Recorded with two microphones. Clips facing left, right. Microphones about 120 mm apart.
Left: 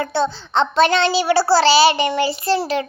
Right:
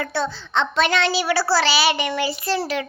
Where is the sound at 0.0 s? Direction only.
25° left (ahead or behind).